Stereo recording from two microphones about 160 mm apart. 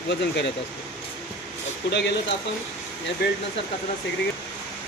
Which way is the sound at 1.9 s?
90° left.